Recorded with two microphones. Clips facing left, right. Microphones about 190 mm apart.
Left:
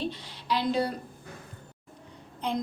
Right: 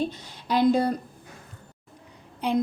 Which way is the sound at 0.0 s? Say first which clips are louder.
Right 4 dB; 50° right (ahead or behind).